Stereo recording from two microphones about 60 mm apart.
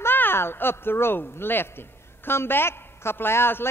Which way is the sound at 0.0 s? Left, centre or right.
Left.